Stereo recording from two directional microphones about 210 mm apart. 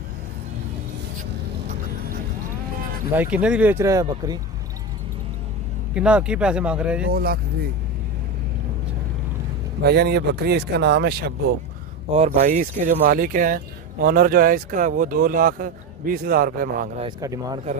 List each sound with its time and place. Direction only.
3.1 s speech: 5° right (ahead or behind)
5.9 s speech: 5° right (ahead or behind)
7.1 s speech: 45° right (ahead or behind)
9.8 s speech: 50° right (ahead or behind)
12.2 s speech: 30° right (ahead or behind)
17.2 s speech: 15° right (ahead or behind)